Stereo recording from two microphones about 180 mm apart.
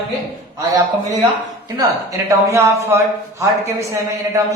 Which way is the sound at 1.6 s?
20° right (ahead or behind).